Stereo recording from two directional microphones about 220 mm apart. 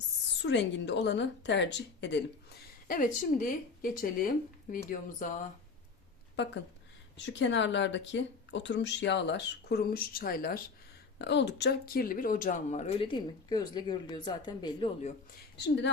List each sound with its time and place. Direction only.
0.4 s speech: 50° left (ahead or behind)
2.8 s speech: 40° left (ahead or behind)
6.3 s speech: 50° left (ahead or behind); by 15.1 s 20° left (ahead or behind)
15.5 s speech: 50° left (ahead or behind)